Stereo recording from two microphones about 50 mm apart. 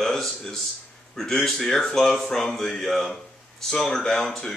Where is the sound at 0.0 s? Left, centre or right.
Centre.